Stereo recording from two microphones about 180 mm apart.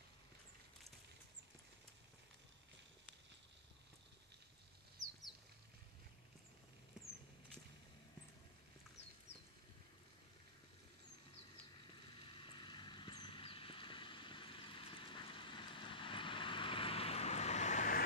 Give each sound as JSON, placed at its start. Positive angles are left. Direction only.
{"t": 12.2, "sound": "vehicle", "side_deg": 25}